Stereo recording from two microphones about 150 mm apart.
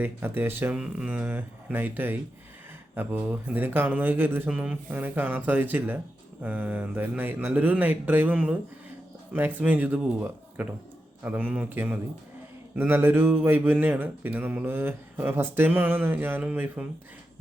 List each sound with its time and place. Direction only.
0.0 s speech: 15° right (ahead or behind)
9.6 s speech: 10° right (ahead or behind)